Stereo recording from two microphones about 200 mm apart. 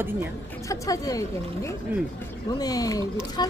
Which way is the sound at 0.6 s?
15° left (ahead or behind).